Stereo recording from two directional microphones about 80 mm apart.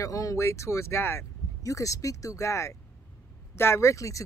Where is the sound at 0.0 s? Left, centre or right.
Left.